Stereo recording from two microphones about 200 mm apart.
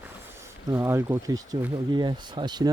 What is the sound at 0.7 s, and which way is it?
Speech, 15° right (ahead or behind).